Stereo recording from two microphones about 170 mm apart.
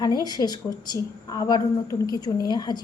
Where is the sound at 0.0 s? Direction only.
25° left (ahead or behind).